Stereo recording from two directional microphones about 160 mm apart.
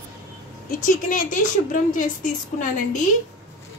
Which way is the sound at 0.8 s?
55° left (ahead or behind).